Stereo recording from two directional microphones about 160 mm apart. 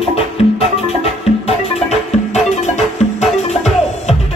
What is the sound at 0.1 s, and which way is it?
Music, 40° left (ahead or behind).